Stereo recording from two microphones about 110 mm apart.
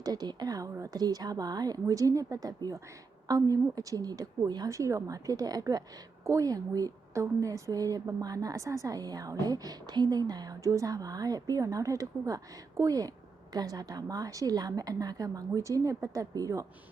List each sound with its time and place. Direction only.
0.0 s a woman's voice: 40° right (ahead or behind)